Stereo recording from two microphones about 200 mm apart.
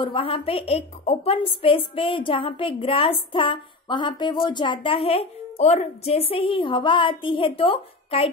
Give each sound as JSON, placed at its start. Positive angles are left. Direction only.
{"t": 0.0, "sound": "a woman's voice", "side_deg": 25}